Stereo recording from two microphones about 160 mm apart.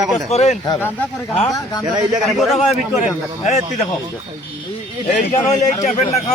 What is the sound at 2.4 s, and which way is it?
Speech, centre (ahead or behind).